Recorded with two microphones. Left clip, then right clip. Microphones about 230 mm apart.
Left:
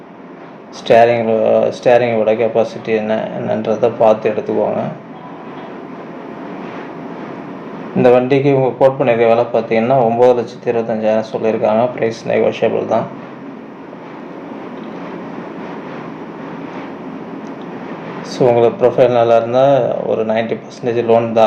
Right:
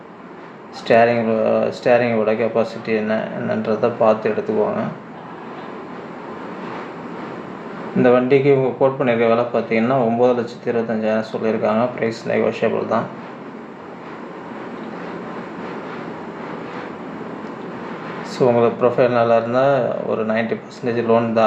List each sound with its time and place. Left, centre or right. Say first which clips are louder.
0.9 s speech: left 4 dB; centre
8.0 s speech: left 3 dB; centre
18.3 s speech: left 4 dB; centre